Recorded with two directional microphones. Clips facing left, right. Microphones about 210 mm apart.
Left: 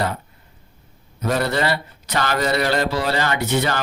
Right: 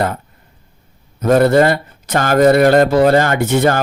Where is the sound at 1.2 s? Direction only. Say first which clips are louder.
Right 10 dB; 50° right (ahead or behind).